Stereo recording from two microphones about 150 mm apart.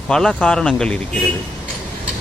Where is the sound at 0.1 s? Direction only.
5° left (ahead or behind).